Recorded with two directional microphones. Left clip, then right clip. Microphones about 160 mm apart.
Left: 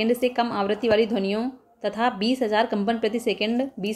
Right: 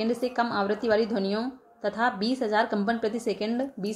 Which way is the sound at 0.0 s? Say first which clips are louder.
Left 4 dB; 20° left (ahead or behind).